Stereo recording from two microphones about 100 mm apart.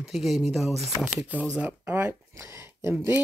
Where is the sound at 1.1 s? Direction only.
15° right (ahead or behind).